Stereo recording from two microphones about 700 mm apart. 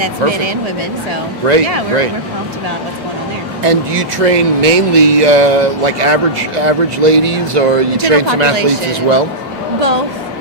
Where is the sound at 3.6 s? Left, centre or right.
Right.